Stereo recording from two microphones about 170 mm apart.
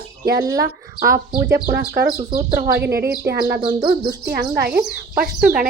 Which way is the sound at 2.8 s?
70° right (ahead or behind).